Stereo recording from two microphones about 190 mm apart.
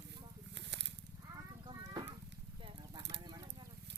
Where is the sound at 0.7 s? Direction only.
65° right (ahead or behind).